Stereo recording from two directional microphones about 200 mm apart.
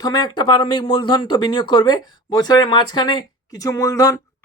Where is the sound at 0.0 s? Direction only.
20° left (ahead or behind).